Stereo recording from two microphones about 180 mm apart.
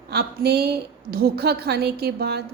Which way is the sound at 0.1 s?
60° right (ahead or behind).